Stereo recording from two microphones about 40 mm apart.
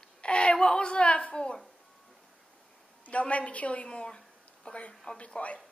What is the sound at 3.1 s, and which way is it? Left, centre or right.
A woman's voice, left.